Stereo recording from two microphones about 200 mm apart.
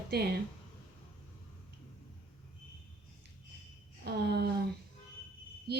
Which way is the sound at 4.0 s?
55° right (ahead or behind).